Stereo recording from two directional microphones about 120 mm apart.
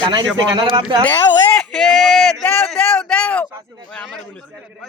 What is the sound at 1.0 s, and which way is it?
Speech, 15° left (ahead or behind).